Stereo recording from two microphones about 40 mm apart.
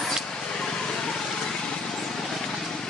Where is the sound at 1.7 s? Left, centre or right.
Centre.